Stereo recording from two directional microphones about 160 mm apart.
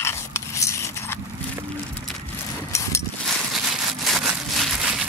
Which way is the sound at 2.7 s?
20° left (ahead or behind).